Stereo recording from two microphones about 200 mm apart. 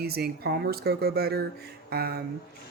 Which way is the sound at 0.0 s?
50° right (ahead or behind).